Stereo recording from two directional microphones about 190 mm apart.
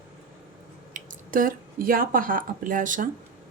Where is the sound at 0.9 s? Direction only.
45° right (ahead or behind).